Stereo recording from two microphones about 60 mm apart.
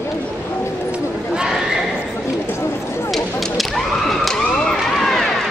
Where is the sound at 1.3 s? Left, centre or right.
Centre.